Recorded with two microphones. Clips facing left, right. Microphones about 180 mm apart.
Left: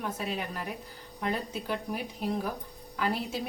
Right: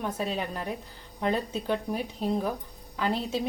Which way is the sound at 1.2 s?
30° right (ahead or behind).